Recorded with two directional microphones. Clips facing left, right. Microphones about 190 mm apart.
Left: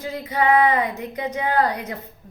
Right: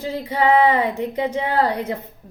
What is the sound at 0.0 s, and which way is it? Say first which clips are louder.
Speech: right 2 dB; 30° right (ahead or behind).